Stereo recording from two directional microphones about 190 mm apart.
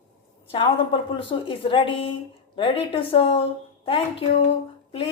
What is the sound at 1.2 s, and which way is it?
A woman's voice, 30° left (ahead or behind).